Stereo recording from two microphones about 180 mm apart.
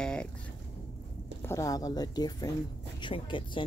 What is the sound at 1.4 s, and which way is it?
Speech, 20° left (ahead or behind).